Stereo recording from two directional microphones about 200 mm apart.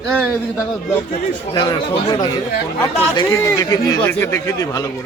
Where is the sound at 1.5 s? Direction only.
20° left (ahead or behind).